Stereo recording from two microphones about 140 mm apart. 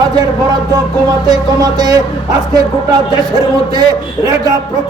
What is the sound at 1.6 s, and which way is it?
Speech, 30° right (ahead or behind).